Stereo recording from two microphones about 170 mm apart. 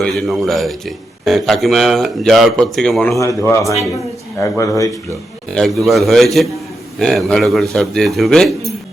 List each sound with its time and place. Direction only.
0.0 s a man's voice: centre (ahead or behind)
3.2 s speech: 20° left (ahead or behind)
5.5 s a man's voice: centre (ahead or behind)